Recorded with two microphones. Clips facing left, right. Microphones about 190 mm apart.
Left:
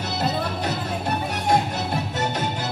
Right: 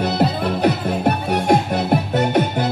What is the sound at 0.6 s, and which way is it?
Music, 60° right (ahead or behind).